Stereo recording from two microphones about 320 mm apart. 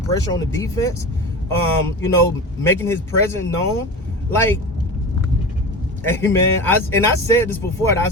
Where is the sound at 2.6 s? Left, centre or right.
Centre.